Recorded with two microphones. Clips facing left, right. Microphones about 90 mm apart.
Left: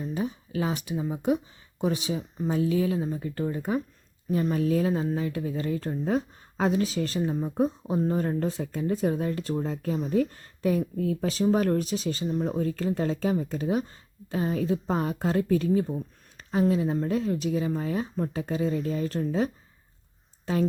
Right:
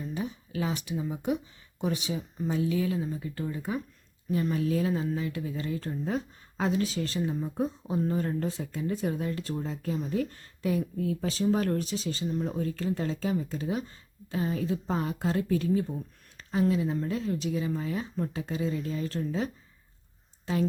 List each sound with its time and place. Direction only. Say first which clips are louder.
0.1 s a sound: left 4 dB; 30° left (ahead or behind)
1.8 s speech: left 3 dB; 35° left (ahead or behind)
4.3 s speech: left 3 dB; 30° left (ahead or behind)